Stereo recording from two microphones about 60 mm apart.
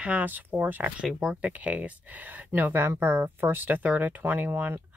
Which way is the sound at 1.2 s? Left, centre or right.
Centre.